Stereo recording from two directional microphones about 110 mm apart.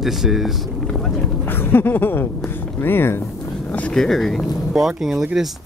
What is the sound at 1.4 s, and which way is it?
Speech, 20° left (ahead or behind).